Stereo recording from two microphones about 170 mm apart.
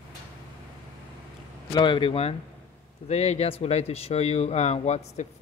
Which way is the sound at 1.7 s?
25° left (ahead or behind).